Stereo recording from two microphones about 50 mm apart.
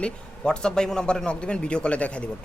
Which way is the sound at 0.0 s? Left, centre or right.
Centre.